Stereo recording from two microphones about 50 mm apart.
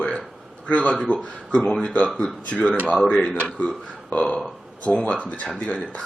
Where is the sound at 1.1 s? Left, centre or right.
Left.